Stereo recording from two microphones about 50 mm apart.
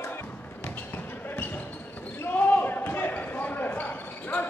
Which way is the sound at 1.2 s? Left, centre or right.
Left.